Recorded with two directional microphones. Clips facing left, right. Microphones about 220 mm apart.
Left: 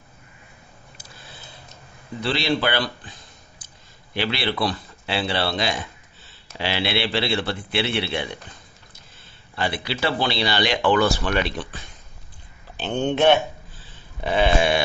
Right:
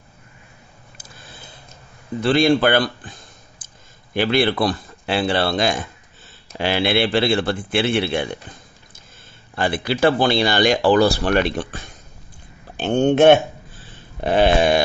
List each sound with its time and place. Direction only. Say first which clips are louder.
2.2 s speech: right 7 dB; 50° right (ahead or behind)
9.6 s speech: right 7 dB; 50° right (ahead or behind)
14.2 s a sound: right 4 dB; 40° right (ahead or behind)